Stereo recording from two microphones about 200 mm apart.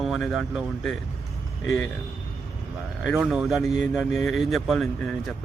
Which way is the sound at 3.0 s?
Centre (ahead or behind).